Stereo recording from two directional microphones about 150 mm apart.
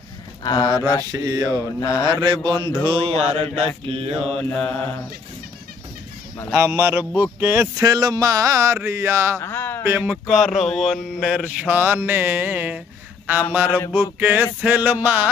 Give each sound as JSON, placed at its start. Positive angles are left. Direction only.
{"t": 0.4, "sound": "speech", "side_deg": 25}
{"t": 1.1, "sound": "speech", "side_deg": -25}
{"t": 1.8, "sound": "speech", "side_deg": 25}
{"t": 2.2, "sound": "mantra", "side_deg": -30}
{"t": 4.5, "sound": "mantra", "side_deg": 10}
{"t": 6.5, "sound": "mantra", "side_deg": -15}
{"t": 7.8, "sound": "speech", "side_deg": -25}
{"t": 8.7, "sound": "mantra", "side_deg": -15}
{"t": 9.4, "sound": "a sound", "side_deg": 15}
{"t": 9.8, "sound": "mantra", "side_deg": -15}
{"t": 10.2, "sound": "speech", "side_deg": 0}
{"t": 10.7, "sound": "mantra", "side_deg": 0}